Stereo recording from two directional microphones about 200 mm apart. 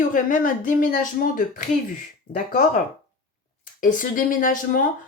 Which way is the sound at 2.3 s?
40° left (ahead or behind).